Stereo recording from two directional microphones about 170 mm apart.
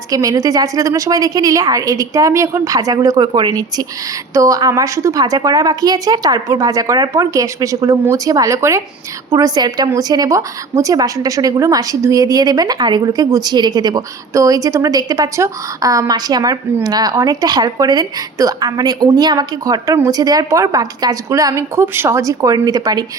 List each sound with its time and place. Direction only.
0.1 s a woman's voice: 20° right (ahead or behind)